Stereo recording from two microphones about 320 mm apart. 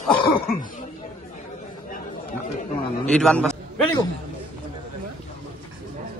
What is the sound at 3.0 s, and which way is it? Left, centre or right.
Speech, centre.